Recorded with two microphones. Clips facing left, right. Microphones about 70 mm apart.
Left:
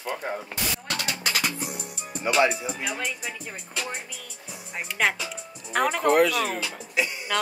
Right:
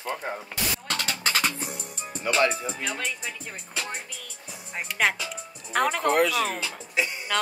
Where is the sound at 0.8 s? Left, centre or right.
Right.